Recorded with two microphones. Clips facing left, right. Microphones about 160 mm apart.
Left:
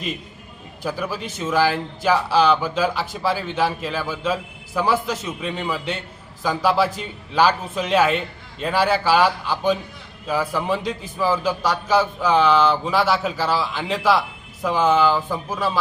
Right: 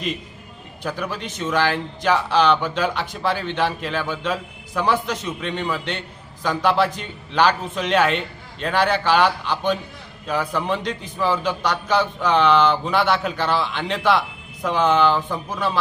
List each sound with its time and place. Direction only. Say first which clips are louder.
0.8 s a man's voice: left 1 dB; 5° left (ahead or behind)